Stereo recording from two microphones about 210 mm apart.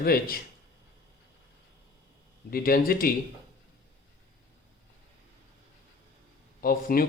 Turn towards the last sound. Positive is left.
turn(degrees=45)  # may be behind; listen again after turning